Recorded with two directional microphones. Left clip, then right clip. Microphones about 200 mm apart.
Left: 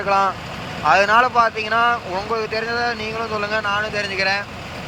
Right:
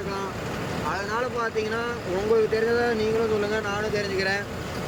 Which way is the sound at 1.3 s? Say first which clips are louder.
Left 10 dB; 10° right (ahead or behind).